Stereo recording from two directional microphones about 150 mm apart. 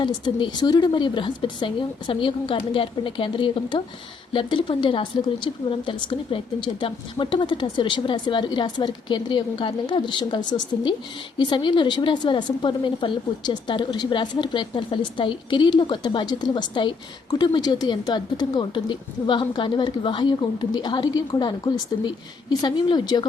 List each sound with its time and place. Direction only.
0.0 s a woman's voice: 30° left (ahead or behind)